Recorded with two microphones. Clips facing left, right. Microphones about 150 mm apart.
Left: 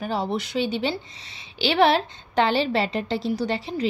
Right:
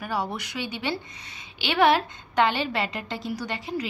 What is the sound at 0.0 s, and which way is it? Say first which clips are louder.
A woman's voice: left 4 dB; 30° left (ahead or behind).